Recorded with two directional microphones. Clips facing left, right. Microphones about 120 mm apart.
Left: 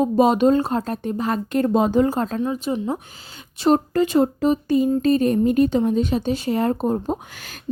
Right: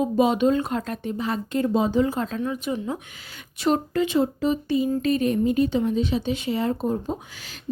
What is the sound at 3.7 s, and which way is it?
Speech, 40° left (ahead or behind).